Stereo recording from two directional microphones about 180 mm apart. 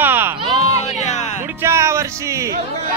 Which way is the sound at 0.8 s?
40° left (ahead or behind).